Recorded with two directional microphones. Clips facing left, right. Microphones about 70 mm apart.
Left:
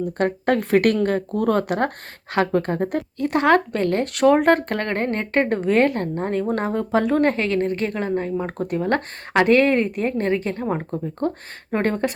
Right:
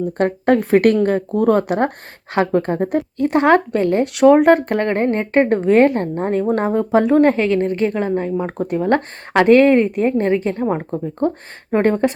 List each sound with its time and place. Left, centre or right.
0.2 s a woman's voice: right